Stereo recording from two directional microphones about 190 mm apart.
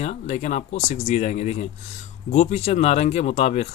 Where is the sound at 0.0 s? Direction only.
35° left (ahead or behind).